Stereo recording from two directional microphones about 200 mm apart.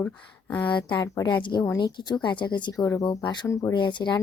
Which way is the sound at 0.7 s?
25° left (ahead or behind).